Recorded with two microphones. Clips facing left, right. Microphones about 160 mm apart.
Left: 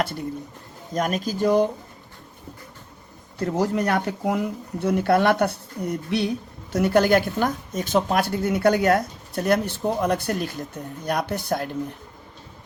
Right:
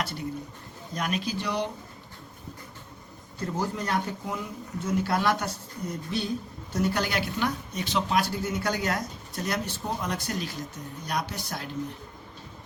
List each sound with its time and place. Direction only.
0.9 s speech: 45° left (ahead or behind)
3.3 s speech: 70° left (ahead or behind); by 11.7 s 55° left (ahead or behind)